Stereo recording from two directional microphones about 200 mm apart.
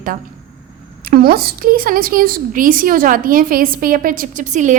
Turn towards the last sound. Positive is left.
turn(degrees=-40)  # may be behind; listen again after turning